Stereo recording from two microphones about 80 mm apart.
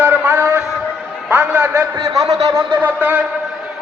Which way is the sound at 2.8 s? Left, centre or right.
Right.